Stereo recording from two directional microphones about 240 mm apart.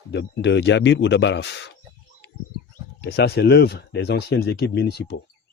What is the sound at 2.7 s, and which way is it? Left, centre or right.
Speech, left.